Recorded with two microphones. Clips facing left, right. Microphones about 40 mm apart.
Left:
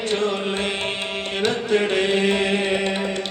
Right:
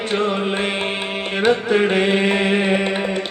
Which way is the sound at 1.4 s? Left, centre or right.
Centre.